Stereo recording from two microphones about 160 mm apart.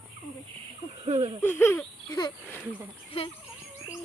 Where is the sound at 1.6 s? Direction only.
15° left (ahead or behind).